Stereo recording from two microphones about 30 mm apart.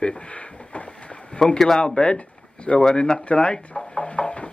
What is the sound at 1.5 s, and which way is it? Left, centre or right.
Speech, centre.